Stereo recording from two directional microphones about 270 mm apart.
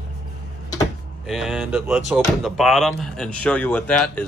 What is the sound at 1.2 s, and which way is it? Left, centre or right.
Speech, centre.